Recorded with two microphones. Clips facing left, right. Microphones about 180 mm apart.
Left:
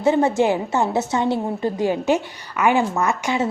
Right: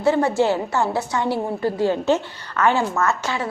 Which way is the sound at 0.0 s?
20° left (ahead or behind).